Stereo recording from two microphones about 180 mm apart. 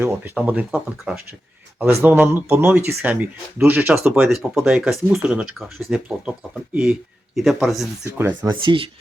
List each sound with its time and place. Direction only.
0.0 s speech: 10° right (ahead or behind)
7.3 s speech: centre (ahead or behind)
8.0 s speech: 15° right (ahead or behind)
8.4 s speech: 25° right (ahead or behind)